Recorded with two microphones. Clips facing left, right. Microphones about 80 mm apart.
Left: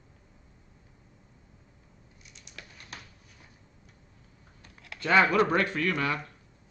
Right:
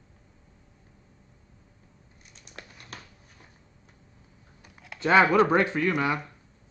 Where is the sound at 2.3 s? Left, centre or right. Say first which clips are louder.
Right 3 dB; right.